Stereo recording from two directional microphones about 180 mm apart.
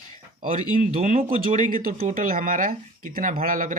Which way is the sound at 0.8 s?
45° right (ahead or behind).